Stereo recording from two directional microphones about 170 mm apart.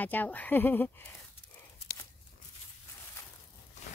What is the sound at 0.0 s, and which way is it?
Speech, 10° left (ahead or behind).